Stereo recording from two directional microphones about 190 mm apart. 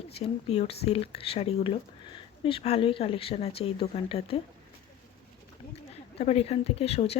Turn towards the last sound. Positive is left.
turn(degrees=30)  # may be behind; listen again after turning